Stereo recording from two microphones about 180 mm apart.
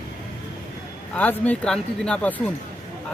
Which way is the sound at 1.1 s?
10° left (ahead or behind).